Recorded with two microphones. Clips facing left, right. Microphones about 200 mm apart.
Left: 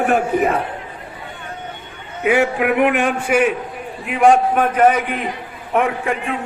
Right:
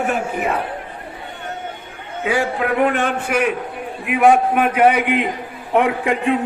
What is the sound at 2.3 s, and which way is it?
A man's voice, 20° left (ahead or behind).